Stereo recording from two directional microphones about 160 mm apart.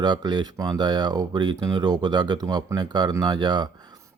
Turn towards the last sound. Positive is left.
turn(degrees=-25)  # may be behind; listen again after turning